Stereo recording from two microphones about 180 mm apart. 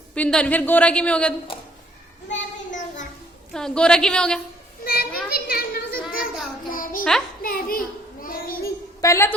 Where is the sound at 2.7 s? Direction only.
45° left (ahead or behind).